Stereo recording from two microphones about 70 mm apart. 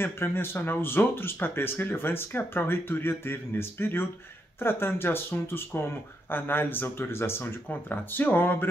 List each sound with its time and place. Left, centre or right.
0.0 s speech: left